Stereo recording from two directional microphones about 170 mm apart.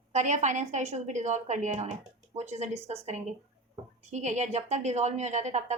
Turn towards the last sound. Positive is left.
turn(degrees=-45)  # may be behind; listen again after turning